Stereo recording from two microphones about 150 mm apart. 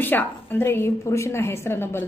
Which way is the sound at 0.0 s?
15° left (ahead or behind).